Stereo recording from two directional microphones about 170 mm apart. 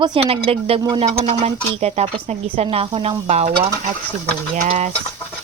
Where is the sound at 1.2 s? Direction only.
40° right (ahead or behind).